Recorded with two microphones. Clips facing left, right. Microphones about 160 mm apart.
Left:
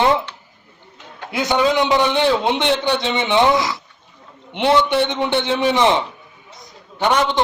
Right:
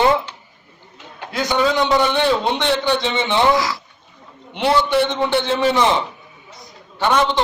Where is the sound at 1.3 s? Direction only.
20° left (ahead or behind).